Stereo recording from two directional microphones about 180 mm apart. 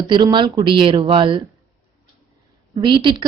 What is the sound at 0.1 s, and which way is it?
A woman's voice, 25° right (ahead or behind).